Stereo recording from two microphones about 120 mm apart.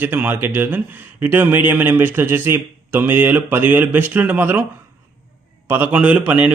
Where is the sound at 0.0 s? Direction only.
15° right (ahead or behind).